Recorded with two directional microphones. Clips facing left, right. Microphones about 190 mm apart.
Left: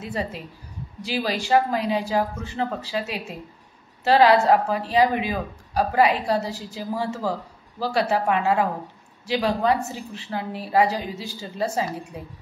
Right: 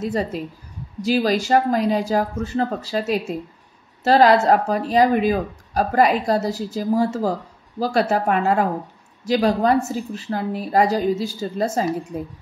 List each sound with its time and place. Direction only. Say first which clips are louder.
0.0 s a woman's voice: right 6 dB; 40° right (ahead or behind)